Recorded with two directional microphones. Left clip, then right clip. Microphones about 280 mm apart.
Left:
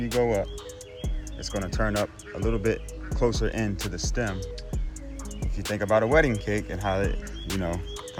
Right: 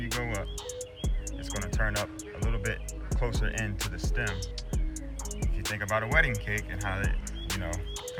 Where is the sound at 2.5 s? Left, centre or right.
Centre.